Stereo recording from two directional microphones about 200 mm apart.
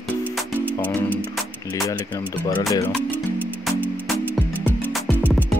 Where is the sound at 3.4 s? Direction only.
10° right (ahead or behind).